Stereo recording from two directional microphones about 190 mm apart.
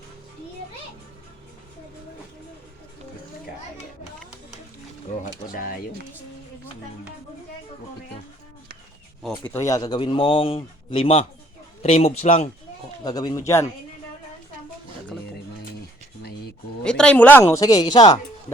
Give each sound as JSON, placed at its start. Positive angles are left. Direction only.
{"t": 5.2, "sound": "a sound", "side_deg": 45}
{"t": 9.5, "sound": "a man's voice", "side_deg": 15}
{"t": 13.1, "sound": "speech", "side_deg": 20}
{"t": 16.8, "sound": "speech", "side_deg": 5}